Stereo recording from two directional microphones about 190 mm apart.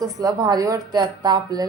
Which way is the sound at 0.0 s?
20° right (ahead or behind).